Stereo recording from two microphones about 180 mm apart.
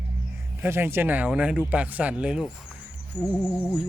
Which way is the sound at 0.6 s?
10° right (ahead or behind).